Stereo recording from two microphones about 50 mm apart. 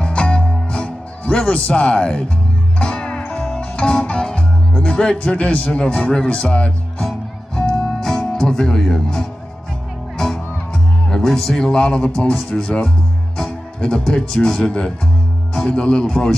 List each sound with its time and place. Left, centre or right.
0.0 s music: centre
5.2 s a man's voice: left
7.0 s music: centre
10.1 s speech: centre